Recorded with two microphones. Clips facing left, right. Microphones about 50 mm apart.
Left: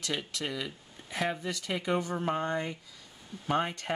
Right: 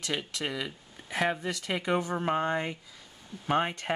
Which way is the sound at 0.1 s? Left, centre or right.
Centre.